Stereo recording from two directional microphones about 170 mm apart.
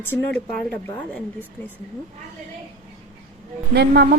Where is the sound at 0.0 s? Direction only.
10° left (ahead or behind).